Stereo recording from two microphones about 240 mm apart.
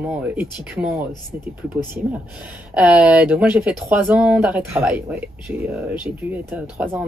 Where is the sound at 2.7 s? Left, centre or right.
Centre.